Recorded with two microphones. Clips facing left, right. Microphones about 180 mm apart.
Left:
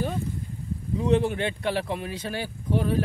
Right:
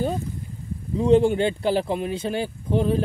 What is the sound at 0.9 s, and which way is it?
Speech, 30° right (ahead or behind).